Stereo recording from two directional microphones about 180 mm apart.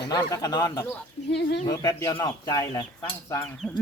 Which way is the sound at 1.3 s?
70° left (ahead or behind).